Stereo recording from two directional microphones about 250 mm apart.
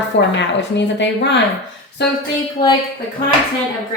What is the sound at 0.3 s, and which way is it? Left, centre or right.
A woman's voice, left.